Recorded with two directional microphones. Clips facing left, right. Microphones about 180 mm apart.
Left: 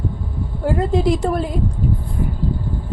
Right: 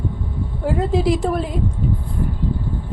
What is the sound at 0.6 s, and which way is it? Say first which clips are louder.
A woman's voice: left 1 dB; centre (ahead or behind).